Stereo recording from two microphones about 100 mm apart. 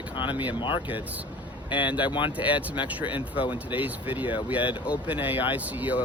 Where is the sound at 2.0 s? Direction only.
55° left (ahead or behind).